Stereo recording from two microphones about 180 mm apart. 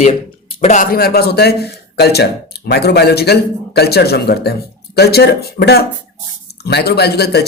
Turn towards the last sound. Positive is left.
turn(degrees=65)  # may be behind; listen again after turning